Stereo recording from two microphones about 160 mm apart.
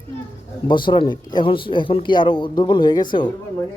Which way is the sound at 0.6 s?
30° left (ahead or behind).